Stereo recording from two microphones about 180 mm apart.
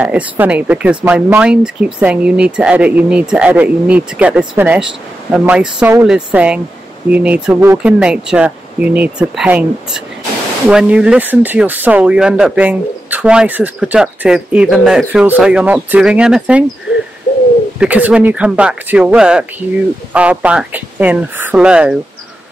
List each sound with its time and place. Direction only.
0.0 s speech: 10° right (ahead or behind)
17.7 s speech: 10° right (ahead or behind)